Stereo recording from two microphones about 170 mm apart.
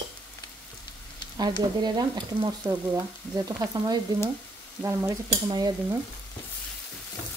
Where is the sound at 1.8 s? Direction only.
25° right (ahead or behind).